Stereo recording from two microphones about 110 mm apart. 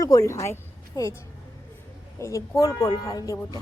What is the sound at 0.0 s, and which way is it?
A woman's voice, 30° left (ahead or behind).